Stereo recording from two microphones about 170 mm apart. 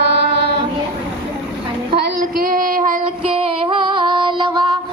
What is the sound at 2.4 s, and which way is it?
Child singing, 55° right (ahead or behind).